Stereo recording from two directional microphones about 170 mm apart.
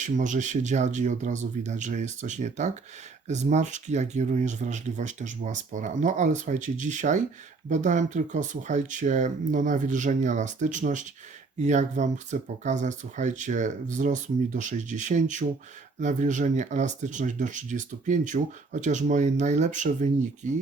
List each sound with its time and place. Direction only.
0.0 s speech: 45° right (ahead or behind)